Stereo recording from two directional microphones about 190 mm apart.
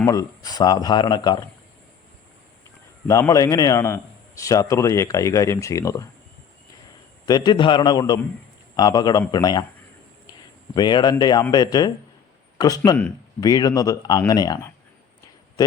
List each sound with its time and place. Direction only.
0.0 s speech: 20° left (ahead or behind)
3.1 s a man's voice: 15° left (ahead or behind)
7.3 s speech: 20° left (ahead or behind)
10.8 s speech: 20° left (ahead or behind)